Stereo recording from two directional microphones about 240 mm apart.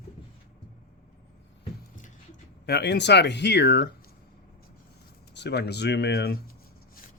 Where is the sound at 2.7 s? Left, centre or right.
Left.